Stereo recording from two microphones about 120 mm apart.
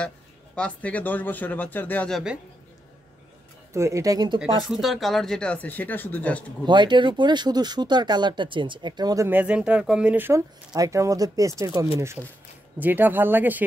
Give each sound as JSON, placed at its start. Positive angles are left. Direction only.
{"t": 0.6, "sound": "speech", "side_deg": 10}
{"t": 2.0, "sound": "speech", "side_deg": 0}
{"t": 3.7, "sound": "speech", "side_deg": -25}
{"t": 4.6, "sound": "speech", "side_deg": 0}
{"t": 6.6, "sound": "speech", "side_deg": -40}
{"t": 9.3, "sound": "speech", "side_deg": -10}
{"t": 10.7, "sound": "speech", "side_deg": -25}